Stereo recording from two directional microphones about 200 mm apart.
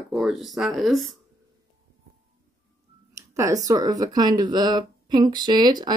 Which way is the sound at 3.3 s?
15° right (ahead or behind).